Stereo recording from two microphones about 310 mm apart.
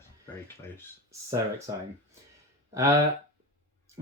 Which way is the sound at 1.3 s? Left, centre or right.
Centre.